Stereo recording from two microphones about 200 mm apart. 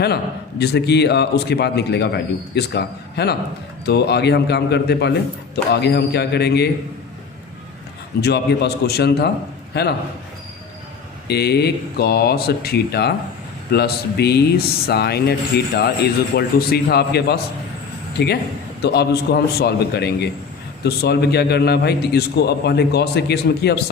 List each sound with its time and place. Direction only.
0.6 s a man's voice: 55° left (ahead or behind)
8.2 s a man's voice: 55° left (ahead or behind)
11.3 s a man's voice: 55° left (ahead or behind)